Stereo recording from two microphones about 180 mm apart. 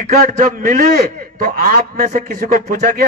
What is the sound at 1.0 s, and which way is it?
A man's voice, 55° right (ahead or behind).